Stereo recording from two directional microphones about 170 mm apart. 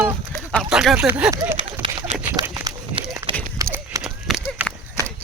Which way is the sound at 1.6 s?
30° right (ahead or behind).